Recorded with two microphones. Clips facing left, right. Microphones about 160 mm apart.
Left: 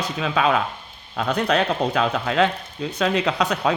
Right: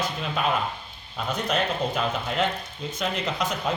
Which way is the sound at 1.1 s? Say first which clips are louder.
Left 6 dB; 75° left (ahead or behind).